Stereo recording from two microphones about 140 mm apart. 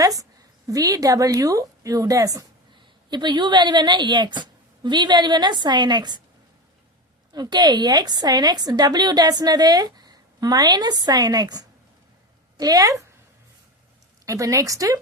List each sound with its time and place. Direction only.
0.0 s a sound: 25° right (ahead or behind)
0.7 s a woman's voice: 25° right (ahead or behind)
7.3 s a woman's voice: 30° right (ahead or behind)
14.3 s a woman's voice: 25° right (ahead or behind)